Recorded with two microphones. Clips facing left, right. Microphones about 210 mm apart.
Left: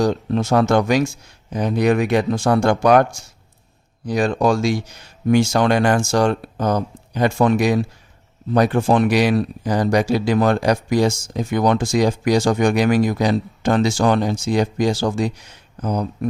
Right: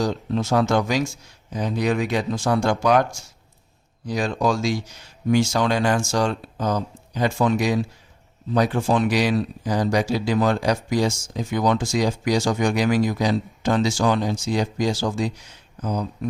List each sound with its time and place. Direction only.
0.0 s speech: 60° left (ahead or behind)
4.1 s speech: 55° left (ahead or behind)